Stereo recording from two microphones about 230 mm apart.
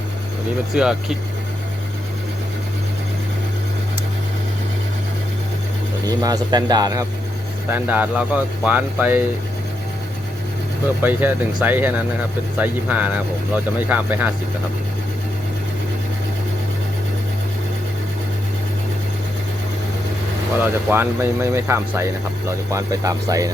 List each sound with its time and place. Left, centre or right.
0.7 s speech: centre
6.1 s speech: centre
11.0 s speech: centre
20.6 s speech: centre